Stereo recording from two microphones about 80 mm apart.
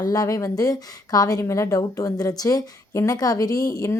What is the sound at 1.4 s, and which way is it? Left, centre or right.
Speech, left.